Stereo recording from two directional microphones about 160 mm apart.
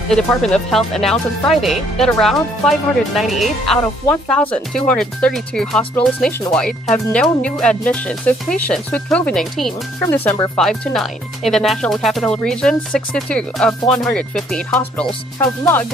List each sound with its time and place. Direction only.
0.1 s speech: 5° left (ahead or behind)
10.0 s speech: 15° left (ahead or behind)
10.5 s speech: 5° left (ahead or behind)
15.3 s speech: 20° left (ahead or behind)